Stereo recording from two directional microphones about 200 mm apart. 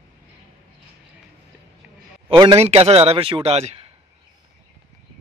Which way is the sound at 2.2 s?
25° right (ahead or behind).